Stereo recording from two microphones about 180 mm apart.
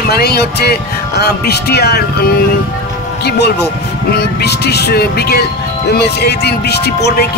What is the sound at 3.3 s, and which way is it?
Speech, 65° left (ahead or behind).